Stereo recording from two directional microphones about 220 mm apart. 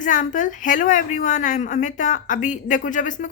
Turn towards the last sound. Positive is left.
turn(degrees=35)  # may be behind; listen again after turning